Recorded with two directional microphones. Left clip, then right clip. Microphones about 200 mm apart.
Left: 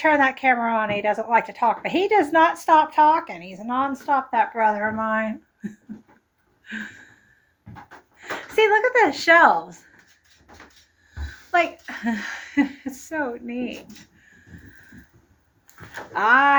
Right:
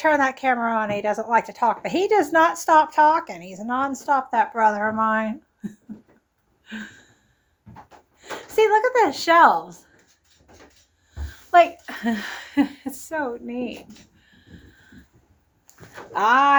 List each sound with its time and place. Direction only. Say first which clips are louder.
0.0 s a woman's voice: left 1 dB; 15° right (ahead or behind)
6.7 s a sound: left 3 dB; 15° right (ahead or behind)
8.5 s a woman's voice: even; 10° right (ahead or behind)
11.5 s a woman's voice: right 5 dB; 25° right (ahead or behind)
16.1 s a woman's voice: even; 15° right (ahead or behind)